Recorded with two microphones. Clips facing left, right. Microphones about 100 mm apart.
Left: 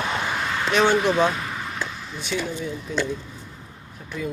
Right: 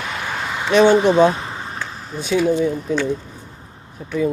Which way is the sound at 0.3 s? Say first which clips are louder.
Right 1 dB; 10° right (ahead or behind).